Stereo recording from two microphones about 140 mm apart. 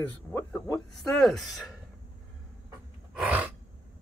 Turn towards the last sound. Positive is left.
turn(degrees=-10)  # may be behind; listen again after turning